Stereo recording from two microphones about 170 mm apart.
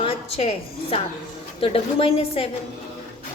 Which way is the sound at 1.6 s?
35° left (ahead or behind).